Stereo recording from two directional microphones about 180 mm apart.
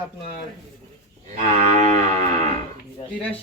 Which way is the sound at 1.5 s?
40° right (ahead or behind).